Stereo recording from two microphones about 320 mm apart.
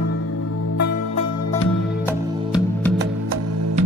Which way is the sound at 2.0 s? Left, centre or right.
Centre.